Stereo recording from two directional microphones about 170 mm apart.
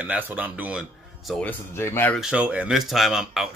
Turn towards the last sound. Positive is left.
turn(degrees=0)  # may be behind; listen again after turning